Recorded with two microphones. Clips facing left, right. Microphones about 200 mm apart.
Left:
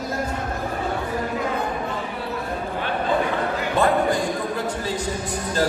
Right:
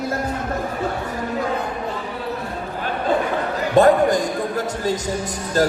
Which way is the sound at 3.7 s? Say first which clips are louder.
Right 7 dB; 40° right (ahead or behind).